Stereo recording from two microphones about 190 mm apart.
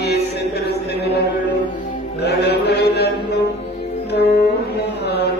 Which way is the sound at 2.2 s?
60° left (ahead or behind).